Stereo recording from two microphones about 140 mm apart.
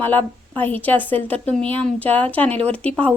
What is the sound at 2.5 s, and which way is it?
Speech, 45° right (ahead or behind).